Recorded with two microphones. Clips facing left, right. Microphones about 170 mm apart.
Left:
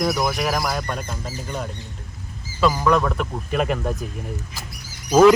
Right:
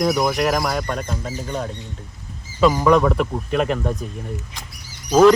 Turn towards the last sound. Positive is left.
turn(degrees=5)  # may be behind; listen again after turning